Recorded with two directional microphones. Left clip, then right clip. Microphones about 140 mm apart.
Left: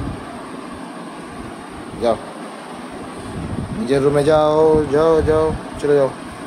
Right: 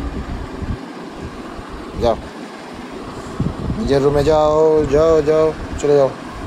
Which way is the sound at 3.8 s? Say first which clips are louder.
Right 1 dB; 10° left (ahead or behind).